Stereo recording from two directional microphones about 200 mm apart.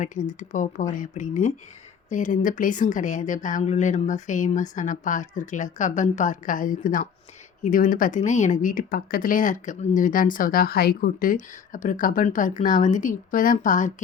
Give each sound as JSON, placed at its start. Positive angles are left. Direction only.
{"t": 0.0, "sound": "speech", "side_deg": 40}